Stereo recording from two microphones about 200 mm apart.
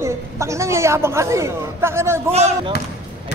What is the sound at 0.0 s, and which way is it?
A man's voice, 15° right (ahead or behind).